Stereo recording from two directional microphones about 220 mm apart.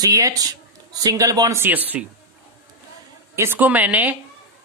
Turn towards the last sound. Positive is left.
turn(degrees=-5)  # may be behind; listen again after turning